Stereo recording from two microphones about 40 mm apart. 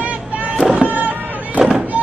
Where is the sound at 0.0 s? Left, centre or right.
Right.